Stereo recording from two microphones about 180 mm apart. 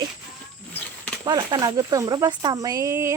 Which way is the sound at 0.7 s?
10° left (ahead or behind).